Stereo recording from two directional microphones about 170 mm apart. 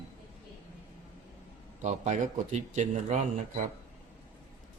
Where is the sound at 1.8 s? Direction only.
45° right (ahead or behind).